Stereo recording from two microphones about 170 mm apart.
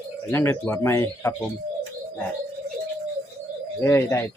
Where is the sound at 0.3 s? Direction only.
15° left (ahead or behind).